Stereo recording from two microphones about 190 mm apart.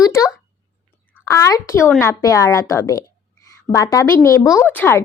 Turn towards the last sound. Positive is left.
turn(degrees=10)  # may be behind; listen again after turning